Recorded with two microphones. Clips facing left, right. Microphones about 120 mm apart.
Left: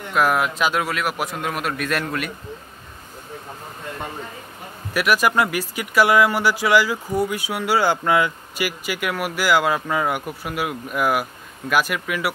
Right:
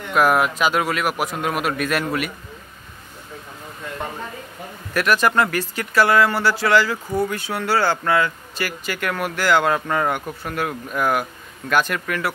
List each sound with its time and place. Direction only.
0.1 s a man's voice: centre (ahead or behind)
4.9 s speech: 10° left (ahead or behind)